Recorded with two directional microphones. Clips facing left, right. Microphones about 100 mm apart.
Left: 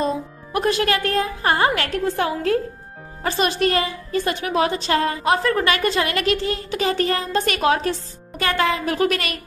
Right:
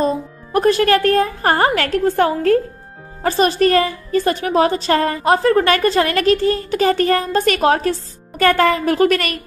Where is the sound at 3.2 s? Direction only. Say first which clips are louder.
Right 6 dB; 40° right (ahead or behind).